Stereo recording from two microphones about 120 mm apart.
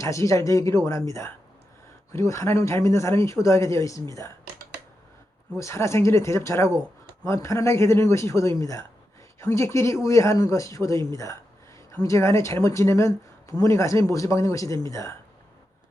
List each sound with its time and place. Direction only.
0.0 s a woman's voice: 25° left (ahead or behind)
5.5 s a woman's voice: 25° left (ahead or behind)